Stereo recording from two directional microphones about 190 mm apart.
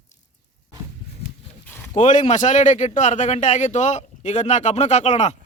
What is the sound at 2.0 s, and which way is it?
A man's voice, 40° left (ahead or behind).